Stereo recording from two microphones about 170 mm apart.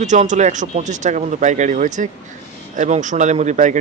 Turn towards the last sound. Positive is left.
turn(degrees=-45)  # may be behind; listen again after turning